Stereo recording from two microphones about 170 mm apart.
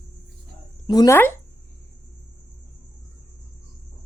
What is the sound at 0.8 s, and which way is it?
Speech, 25° left (ahead or behind).